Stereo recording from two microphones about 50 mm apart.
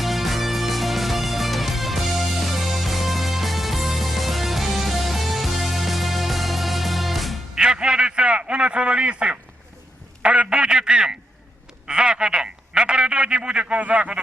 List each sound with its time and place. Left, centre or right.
0.0 s music: centre
7.5 s radio: centre
10.2 s a sound: centre
11.9 s telephone: centre